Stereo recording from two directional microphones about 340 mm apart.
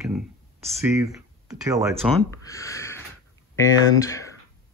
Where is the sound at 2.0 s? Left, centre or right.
Centre.